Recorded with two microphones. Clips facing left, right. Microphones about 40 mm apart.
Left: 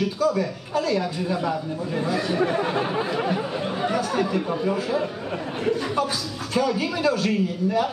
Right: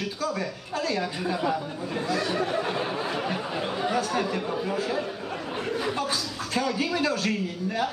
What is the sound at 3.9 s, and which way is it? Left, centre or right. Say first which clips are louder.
A man's voice: left 3 dB; centre.